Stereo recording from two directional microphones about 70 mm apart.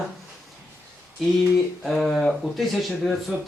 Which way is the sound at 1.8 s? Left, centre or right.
Centre.